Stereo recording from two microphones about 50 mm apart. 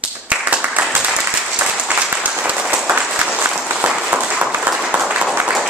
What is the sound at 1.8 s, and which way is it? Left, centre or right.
Applause, right.